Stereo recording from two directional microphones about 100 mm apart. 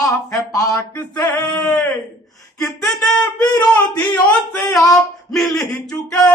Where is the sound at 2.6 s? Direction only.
Centre (ahead or behind).